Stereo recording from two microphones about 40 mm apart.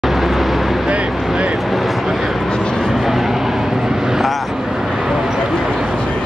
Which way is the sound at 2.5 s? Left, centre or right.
Centre.